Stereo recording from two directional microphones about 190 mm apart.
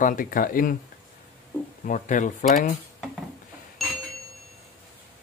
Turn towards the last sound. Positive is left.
turn(degrees=0)  # may be behind; listen again after turning